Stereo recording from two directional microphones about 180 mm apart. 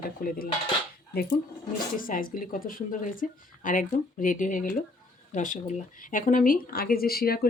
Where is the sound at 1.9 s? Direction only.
50° left (ahead or behind).